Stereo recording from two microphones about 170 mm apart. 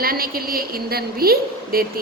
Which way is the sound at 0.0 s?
60° right (ahead or behind).